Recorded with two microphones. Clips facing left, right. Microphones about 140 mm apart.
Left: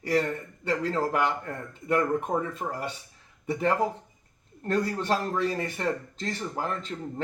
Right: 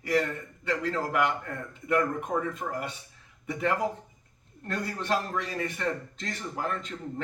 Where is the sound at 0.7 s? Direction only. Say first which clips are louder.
Left 3 dB; 35° left (ahead or behind).